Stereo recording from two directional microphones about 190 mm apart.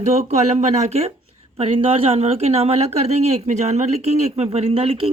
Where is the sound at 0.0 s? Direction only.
35° right (ahead or behind).